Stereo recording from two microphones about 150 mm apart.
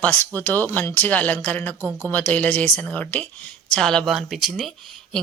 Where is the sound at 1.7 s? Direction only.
20° right (ahead or behind).